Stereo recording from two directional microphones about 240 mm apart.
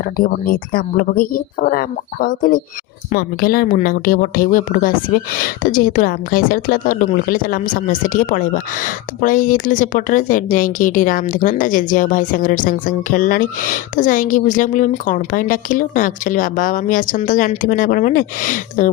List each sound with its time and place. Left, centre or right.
0.0 s speech: left